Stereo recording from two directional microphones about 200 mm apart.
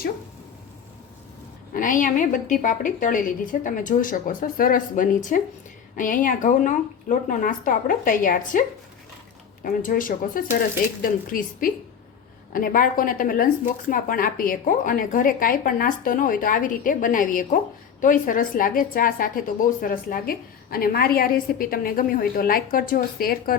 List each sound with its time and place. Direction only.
1.7 s a woman's voice: 40° left (ahead or behind)
9.6 s a woman's voice: 45° left (ahead or behind)